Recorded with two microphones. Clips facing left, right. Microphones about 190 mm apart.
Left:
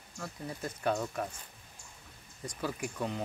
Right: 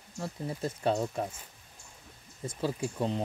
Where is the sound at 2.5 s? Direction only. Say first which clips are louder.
Right 4 dB; 25° right (ahead or behind).